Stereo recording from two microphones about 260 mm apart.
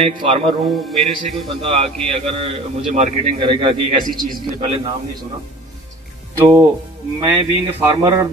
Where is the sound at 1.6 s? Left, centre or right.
Right.